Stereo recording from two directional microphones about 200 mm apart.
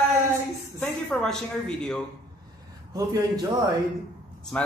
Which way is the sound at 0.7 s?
5° left (ahead or behind).